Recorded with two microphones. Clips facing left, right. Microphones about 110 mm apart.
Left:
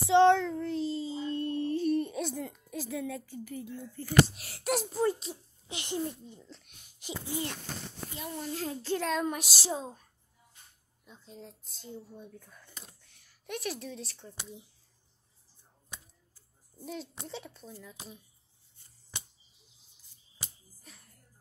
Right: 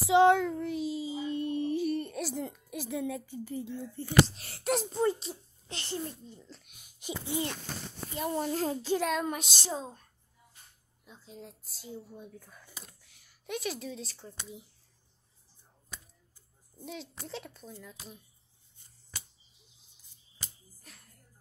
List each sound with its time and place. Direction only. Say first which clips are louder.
0.1 s child singing: even; 10° right (ahead or behind)
1.9 s a sound: left 3 dB; centre (ahead or behind)
2.7 s speech: right 1 dB; 20° right (ahead or behind)
4.4 s speech: right 1 dB; centre (ahead or behind)
5.7 s a child's voice: left 3 dB; 15° left (ahead or behind)
6.5 s a child's voice: even; 5° right (ahead or behind)
8.2 s a child's voice: right 6 dB; 50° right (ahead or behind)
8.8 s a child's voice: left 3 dB; 10° right (ahead or behind); by 10.0 s 10° left (ahead or behind)
11.1 s speech: right 1 dB; centre (ahead or behind)
16.8 s speech: left 2 dB; centre (ahead or behind)
20.9 s music: even; centre (ahead or behind)